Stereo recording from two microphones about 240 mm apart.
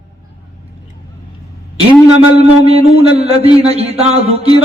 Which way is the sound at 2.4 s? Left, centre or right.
Right.